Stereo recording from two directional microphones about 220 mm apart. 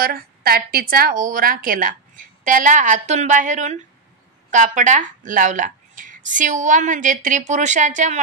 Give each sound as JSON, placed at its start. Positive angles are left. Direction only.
{"t": 0.0, "sound": "a woman's voice", "side_deg": -45}